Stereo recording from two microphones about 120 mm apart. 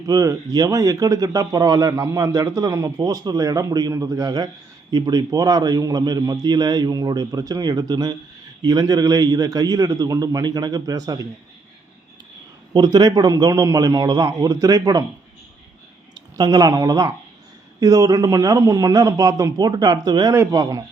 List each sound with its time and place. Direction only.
0.0 s speech: 30° right (ahead or behind)
12.7 s speech: 35° right (ahead or behind)
16.1 s a man's voice: 35° right (ahead or behind)